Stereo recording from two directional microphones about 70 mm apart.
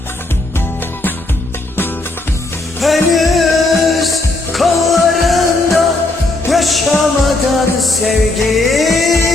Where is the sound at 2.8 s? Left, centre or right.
Centre.